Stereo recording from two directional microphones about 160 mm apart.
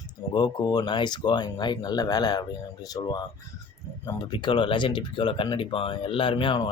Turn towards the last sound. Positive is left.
turn(degrees=30)  # may be behind; listen again after turning